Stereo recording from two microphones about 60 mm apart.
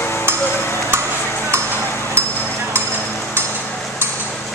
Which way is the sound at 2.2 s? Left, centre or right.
Right.